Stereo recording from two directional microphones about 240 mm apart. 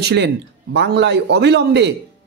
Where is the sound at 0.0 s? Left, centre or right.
Right.